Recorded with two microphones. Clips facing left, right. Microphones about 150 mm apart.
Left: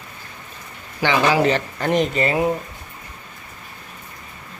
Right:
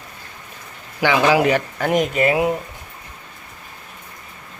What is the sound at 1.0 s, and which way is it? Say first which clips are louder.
Speech: right 2 dB; 10° right (ahead or behind).